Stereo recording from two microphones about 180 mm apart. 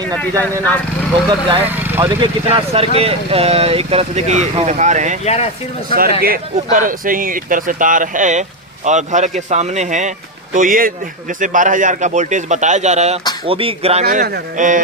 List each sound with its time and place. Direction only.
1.3 s speech: 30° right (ahead or behind)
5.2 s speech: 35° left (ahead or behind)
5.9 s speech: 55° right (ahead or behind); by 14.0 s 35° right (ahead or behind)
14.0 s speech: 50° right (ahead or behind)